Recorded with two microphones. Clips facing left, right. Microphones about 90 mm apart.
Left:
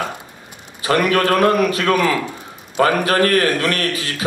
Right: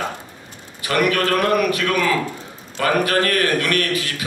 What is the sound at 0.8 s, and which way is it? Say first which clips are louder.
A man's voice: left 3 dB; 30° left (ahead or behind).